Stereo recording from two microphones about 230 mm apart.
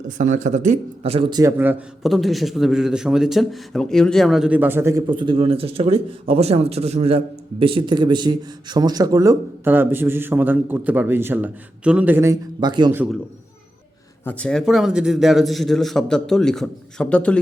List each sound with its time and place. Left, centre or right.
0.2 s a man's voice: right
14.3 s a man's voice: centre